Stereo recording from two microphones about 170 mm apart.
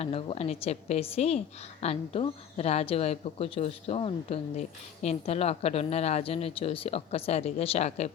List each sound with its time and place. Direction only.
0.0 s a woman's voice: 35° left (ahead or behind)